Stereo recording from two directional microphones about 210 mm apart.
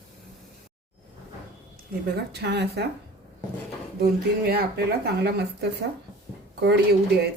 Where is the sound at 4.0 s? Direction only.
50° right (ahead or behind).